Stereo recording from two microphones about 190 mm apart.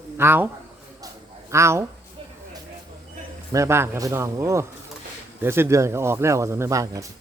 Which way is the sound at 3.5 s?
15° right (ahead or behind).